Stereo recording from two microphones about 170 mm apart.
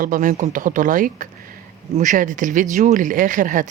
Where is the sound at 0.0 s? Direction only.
50° right (ahead or behind).